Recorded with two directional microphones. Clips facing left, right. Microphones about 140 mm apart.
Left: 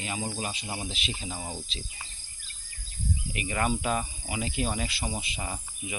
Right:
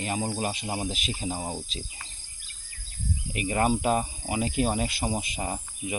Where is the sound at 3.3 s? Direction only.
35° right (ahead or behind).